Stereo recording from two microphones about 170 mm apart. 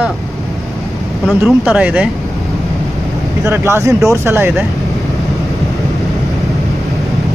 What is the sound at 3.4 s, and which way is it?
Speech, 15° right (ahead or behind).